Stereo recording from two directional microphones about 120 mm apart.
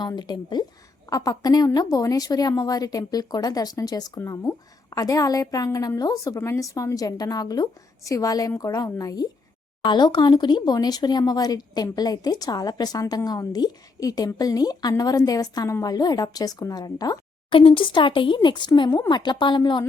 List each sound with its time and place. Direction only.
0.0 s a woman's voice: 35° left (ahead or behind)
17.5 s speech: 50° left (ahead or behind)